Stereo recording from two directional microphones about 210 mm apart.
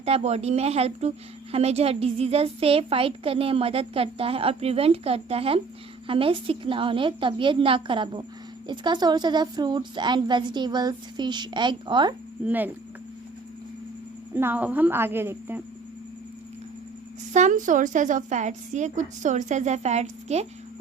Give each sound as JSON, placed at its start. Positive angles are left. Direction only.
{"t": 0.0, "sound": "a woman's voice", "side_deg": -30}
{"t": 12.5, "sound": "a woman's voice", "side_deg": -10}
{"t": 14.3, "sound": "a woman's voice", "side_deg": -10}
{"t": 17.3, "sound": "a woman's voice", "side_deg": -35}